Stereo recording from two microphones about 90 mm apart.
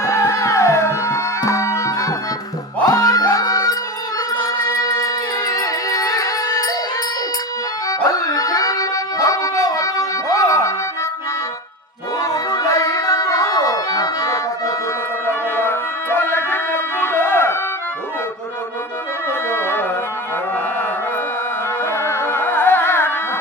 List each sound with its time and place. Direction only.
0.0 s music: 35° left (ahead or behind)
7.9 s dog: 40° left (ahead or behind)
12.2 s music: 40° left (ahead or behind)
15.3 s music: 25° left (ahead or behind)
19.5 s music: 25° left (ahead or behind)
21.9 s music: 30° left (ahead or behind)